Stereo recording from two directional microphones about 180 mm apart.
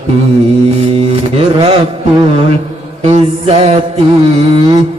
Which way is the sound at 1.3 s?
30° right (ahead or behind).